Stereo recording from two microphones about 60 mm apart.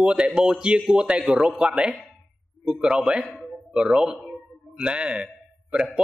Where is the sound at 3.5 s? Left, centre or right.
Centre.